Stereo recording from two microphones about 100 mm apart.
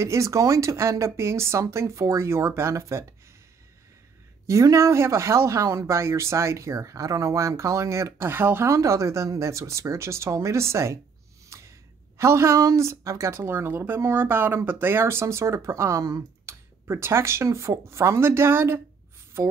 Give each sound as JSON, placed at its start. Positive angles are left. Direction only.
{"t": 0.0, "sound": "a woman's voice", "side_deg": -30}
{"t": 4.5, "sound": "a woman's voice", "side_deg": -35}
{"t": 11.4, "sound": "a sound", "side_deg": -30}
{"t": 12.2, "sound": "a woman's voice", "side_deg": -30}